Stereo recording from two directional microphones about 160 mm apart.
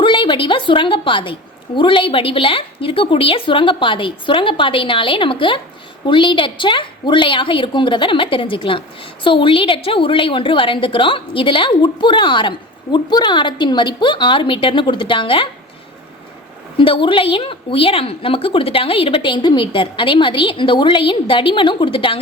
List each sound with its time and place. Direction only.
0.0 s a woman's voice: 30° left (ahead or behind)
16.7 s a woman's voice: 35° left (ahead or behind)